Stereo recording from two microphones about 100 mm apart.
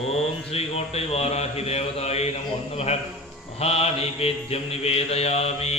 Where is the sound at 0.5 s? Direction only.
90° left.